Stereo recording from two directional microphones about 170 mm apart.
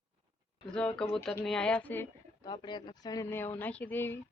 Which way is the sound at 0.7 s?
5° left (ahead or behind).